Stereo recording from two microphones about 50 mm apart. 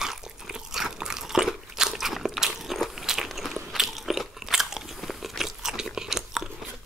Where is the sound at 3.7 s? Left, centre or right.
Centre.